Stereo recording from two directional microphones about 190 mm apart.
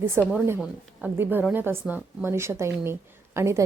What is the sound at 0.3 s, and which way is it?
A woman's voice, 10° right (ahead or behind).